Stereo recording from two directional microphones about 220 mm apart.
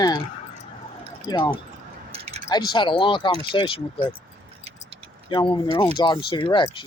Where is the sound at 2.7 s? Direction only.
20° left (ahead or behind).